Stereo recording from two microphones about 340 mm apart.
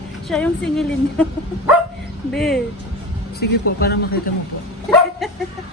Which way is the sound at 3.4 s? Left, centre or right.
Left.